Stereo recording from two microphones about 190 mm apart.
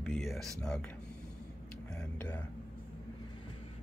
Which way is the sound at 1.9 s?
10° left (ahead or behind).